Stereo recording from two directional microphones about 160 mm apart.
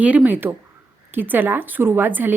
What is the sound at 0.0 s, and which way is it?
A woman's voice, 10° right (ahead or behind).